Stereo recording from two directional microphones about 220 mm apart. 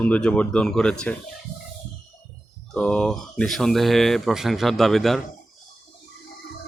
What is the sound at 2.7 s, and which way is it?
Speech, 5° left (ahead or behind).